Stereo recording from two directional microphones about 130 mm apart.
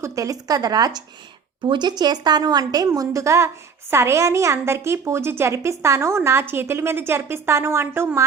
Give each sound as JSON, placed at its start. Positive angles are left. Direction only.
{"t": 0.0, "sound": "a woman's voice", "side_deg": -25}